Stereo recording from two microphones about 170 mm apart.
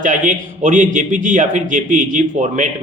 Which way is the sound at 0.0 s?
50° right (ahead or behind).